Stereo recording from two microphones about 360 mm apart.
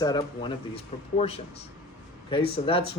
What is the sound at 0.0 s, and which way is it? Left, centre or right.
Speech, centre.